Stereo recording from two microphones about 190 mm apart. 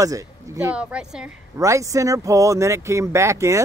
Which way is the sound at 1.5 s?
15° right (ahead or behind).